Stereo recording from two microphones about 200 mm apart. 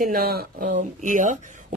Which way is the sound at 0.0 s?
50° right (ahead or behind).